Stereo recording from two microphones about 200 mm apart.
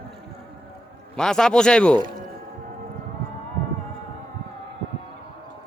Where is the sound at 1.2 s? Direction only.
5° left (ahead or behind).